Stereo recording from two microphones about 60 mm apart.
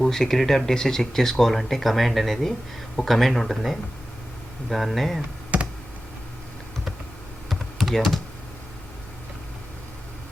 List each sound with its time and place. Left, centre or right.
0.0 s speech: centre
5.5 s computer keyboard: right
7.5 s computer keyboard: centre